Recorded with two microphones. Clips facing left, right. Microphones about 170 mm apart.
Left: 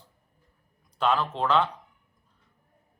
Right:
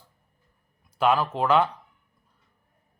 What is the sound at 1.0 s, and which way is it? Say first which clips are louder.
Speech: right 3 dB; 10° right (ahead or behind).